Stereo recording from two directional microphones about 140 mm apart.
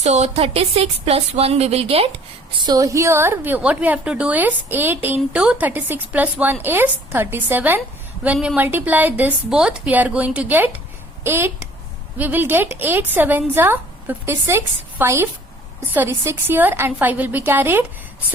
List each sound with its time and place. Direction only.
0.0 s speech: 55° right (ahead or behind)
2.6 s a woman's voice: 25° right (ahead or behind)